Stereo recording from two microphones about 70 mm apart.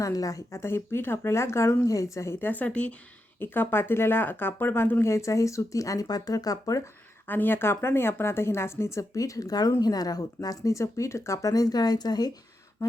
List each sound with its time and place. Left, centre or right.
0.0 s speech: left
0.6 s speech: left
1.8 s a woman's voice: left
2.4 s speech: left
3.4 s speech: left
7.3 s speech: left
11.5 s speech: left